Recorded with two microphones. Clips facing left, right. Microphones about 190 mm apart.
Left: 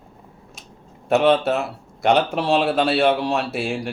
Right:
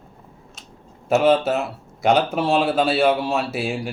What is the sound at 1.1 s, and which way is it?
Speech, centre (ahead or behind).